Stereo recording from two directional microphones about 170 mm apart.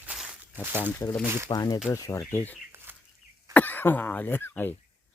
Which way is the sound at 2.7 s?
15° right (ahead or behind).